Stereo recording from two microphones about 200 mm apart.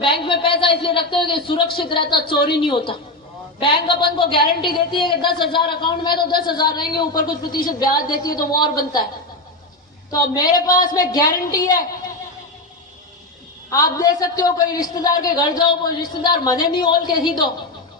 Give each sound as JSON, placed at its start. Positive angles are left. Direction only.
{"t": 0.0, "sound": "a woman's voice", "side_deg": 25}
{"t": 10.1, "sound": "a woman's voice", "side_deg": 20}
{"t": 13.7, "sound": "a woman's voice", "side_deg": 15}